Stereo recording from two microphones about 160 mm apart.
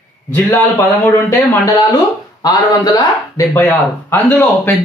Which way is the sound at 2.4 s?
25° left (ahead or behind).